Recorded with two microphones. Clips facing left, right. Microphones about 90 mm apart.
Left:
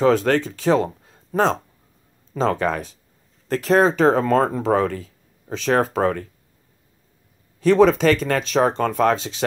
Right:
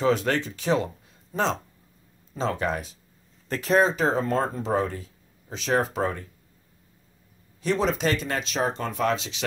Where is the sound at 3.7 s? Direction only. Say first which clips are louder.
Left 5 dB; 85° left; by 6.3 s 60° left (ahead or behind).